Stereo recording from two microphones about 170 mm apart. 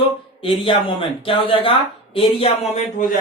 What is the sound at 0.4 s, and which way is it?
A man's voice, 30° left (ahead or behind).